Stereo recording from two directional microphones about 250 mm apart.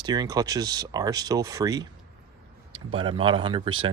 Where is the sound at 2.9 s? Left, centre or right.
Right.